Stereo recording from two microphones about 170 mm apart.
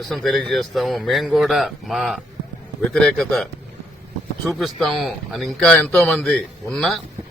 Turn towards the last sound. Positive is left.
turn(degrees=0)  # may be behind; listen again after turning